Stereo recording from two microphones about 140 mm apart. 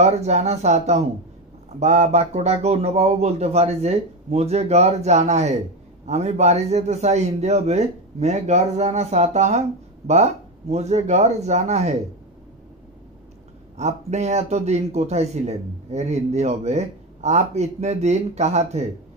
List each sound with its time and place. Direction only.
0.0 s a man's voice: 50° right (ahead or behind)
13.7 s a man's voice: 55° right (ahead or behind)